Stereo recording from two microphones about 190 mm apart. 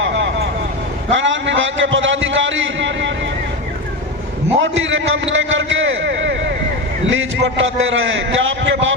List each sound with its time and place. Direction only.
0.0 s vehicle: 75° right (ahead or behind)
1.1 s a sound: 80° right
4.5 s a man's voice: 90° right
7.1 s a man's voice: 90° right